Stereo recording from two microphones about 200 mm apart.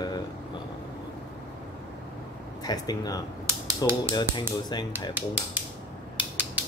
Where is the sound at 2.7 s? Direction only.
20° left (ahead or behind).